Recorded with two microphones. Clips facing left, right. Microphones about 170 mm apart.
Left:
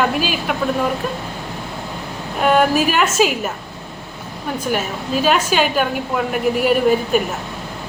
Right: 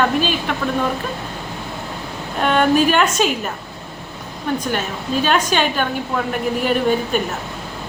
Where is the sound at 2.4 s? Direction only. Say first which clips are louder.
Even; 5° left (ahead or behind).